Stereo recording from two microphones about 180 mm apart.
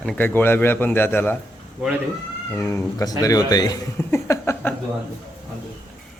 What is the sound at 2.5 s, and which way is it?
A man's voice, 20° left (ahead or behind).